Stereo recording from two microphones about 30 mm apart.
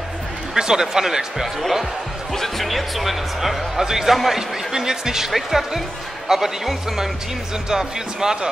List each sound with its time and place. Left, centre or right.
0.6 s speech: right
1.6 s speech: centre